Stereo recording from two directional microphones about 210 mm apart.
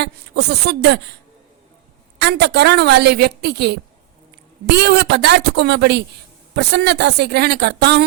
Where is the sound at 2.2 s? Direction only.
55° right (ahead or behind).